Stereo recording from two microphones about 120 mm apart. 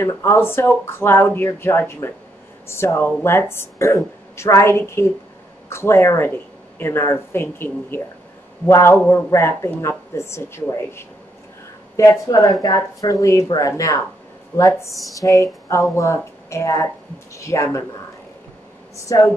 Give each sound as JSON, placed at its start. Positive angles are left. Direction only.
{"t": 0.0, "sound": "a woman's voice", "side_deg": 20}
{"t": 19.1, "sound": "a woman's voice", "side_deg": 25}